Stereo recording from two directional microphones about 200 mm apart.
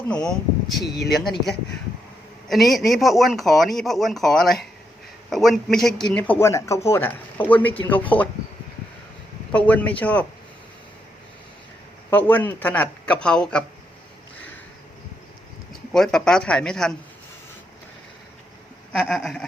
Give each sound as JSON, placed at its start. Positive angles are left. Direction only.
{"t": 0.1, "sound": "speech", "side_deg": 5}
{"t": 0.9, "sound": "speech", "side_deg": 55}
{"t": 1.1, "sound": "speech", "side_deg": 0}
{"t": 9.5, "sound": "speech", "side_deg": 5}
{"t": 12.1, "sound": "speech", "side_deg": 10}
{"t": 15.9, "sound": "speech", "side_deg": 5}
{"t": 18.9, "sound": "speech", "side_deg": 5}